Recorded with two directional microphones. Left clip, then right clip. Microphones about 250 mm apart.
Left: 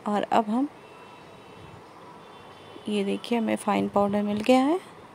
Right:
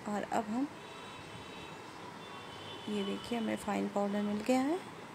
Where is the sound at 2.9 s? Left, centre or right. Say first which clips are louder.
Left 11 dB; left.